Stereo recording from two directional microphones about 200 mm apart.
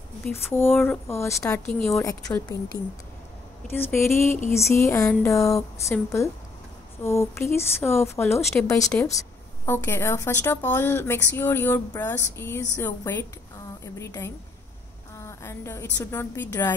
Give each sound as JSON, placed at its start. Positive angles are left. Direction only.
{"t": 0.2, "sound": "a woman's voice", "side_deg": 10}
{"t": 3.7, "sound": "a woman's voice", "side_deg": 10}